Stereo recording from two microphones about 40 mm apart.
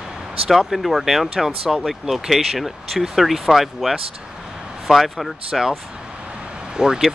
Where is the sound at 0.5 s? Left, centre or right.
Centre.